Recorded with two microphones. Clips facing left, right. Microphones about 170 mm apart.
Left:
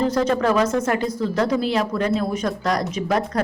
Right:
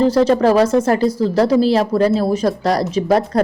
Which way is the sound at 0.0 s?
35° right (ahead or behind).